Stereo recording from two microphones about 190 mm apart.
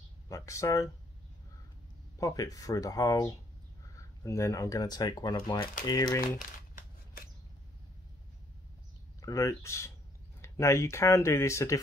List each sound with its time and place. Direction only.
0.3 s speech: 15° left (ahead or behind)
2.1 s speech: 20° left (ahead or behind)
9.2 s speech: 15° left (ahead or behind)